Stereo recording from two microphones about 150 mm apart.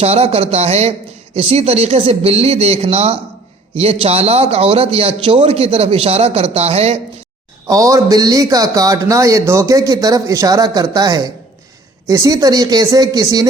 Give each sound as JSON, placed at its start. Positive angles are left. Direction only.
{"t": 0.0, "sound": "a man's voice", "side_deg": -45}
{"t": 7.7, "sound": "a man's voice", "side_deg": -20}